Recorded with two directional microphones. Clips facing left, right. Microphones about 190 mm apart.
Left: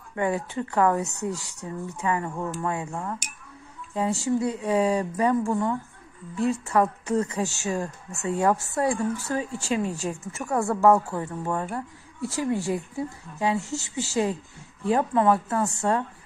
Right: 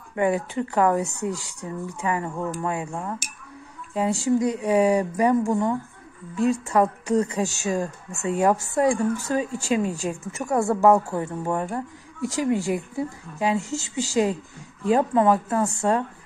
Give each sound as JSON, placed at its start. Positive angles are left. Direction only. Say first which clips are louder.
{"t": 0.1, "sound": "speech", "louder": "right 4 dB", "side_deg": -15}
{"t": 10.5, "sound": "speech", "louder": "right 3 dB", "side_deg": -35}
{"t": 10.8, "sound": "speech", "louder": "even", "side_deg": -20}
{"t": 15.6, "sound": "speech", "louder": "right 2 dB", "side_deg": -15}